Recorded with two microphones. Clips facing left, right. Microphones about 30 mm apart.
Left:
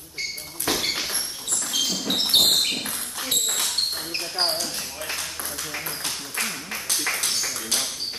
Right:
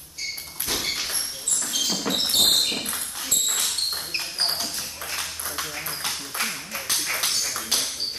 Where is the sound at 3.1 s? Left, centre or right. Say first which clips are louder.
Left 2 dB; centre.